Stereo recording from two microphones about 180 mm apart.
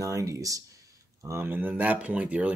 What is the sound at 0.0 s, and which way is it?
Speech, 20° right (ahead or behind).